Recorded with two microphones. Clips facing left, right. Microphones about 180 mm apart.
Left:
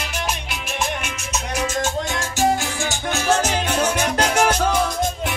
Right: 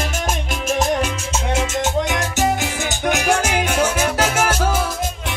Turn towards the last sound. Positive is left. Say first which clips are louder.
# even
turn(degrees=-5)  # may be behind; listen again after turning